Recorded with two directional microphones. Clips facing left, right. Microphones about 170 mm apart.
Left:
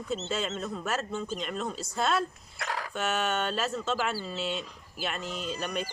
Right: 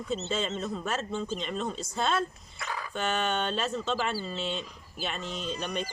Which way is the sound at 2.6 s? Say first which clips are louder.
Left 2 dB; 75° left (ahead or behind).